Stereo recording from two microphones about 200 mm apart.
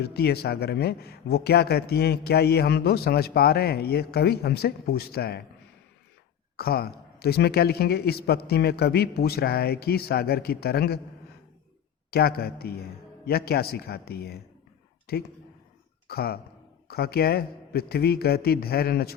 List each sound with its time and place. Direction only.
0.0 s speech: 55° left (ahead or behind)
6.6 s speech: 50° left (ahead or behind)
12.1 s speech: 50° left (ahead or behind)